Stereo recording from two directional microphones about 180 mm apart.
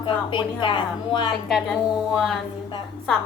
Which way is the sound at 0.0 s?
30° left (ahead or behind).